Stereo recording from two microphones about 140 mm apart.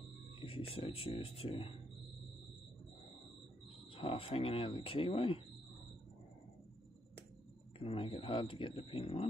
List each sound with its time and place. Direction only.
0.4 s speech: 45° left (ahead or behind)
3.9 s speech: 45° left (ahead or behind)
7.8 s speech: 40° left (ahead or behind)